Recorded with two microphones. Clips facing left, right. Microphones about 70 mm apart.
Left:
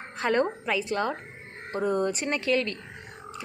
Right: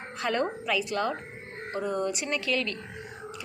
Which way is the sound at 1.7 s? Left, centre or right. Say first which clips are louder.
Left 3 dB; left.